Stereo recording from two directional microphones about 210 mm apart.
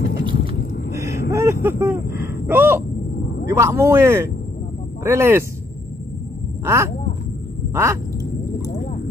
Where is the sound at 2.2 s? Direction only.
10° right (ahead or behind).